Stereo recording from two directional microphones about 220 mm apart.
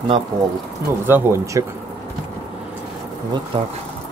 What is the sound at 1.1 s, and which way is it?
Speech, 10° right (ahead or behind).